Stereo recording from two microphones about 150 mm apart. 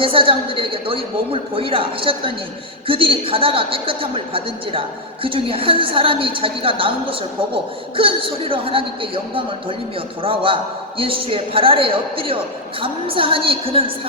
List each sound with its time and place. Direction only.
0.0 s a woman's voice: 40° right (ahead or behind)